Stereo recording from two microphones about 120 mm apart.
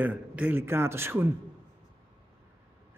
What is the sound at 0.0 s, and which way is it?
A man's voice, 15° right (ahead or behind).